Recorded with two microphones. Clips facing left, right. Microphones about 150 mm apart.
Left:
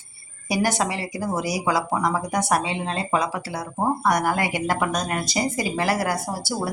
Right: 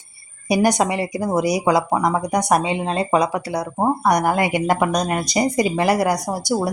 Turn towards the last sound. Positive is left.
turn(degrees=-20)  # may be behind; listen again after turning